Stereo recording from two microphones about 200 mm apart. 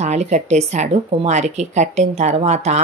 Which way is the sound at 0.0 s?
35° right (ahead or behind).